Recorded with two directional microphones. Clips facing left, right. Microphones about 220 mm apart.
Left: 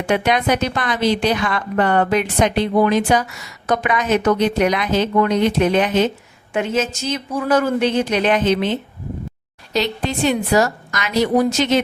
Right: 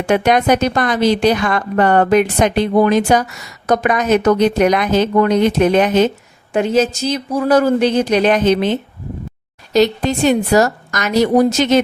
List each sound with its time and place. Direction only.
0.1 s a woman's voice: 45° right (ahead or behind)
9.7 s a woman's voice: 45° right (ahead or behind)